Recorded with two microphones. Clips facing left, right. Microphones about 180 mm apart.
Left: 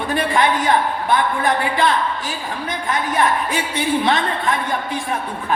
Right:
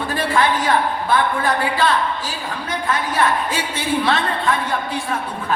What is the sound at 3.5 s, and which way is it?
A woman's voice, 20° left (ahead or behind).